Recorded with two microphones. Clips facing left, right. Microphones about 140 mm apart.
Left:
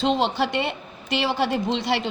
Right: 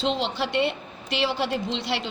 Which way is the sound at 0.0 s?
50° left (ahead or behind).